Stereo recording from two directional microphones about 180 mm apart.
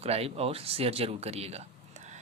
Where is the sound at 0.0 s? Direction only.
35° right (ahead or behind).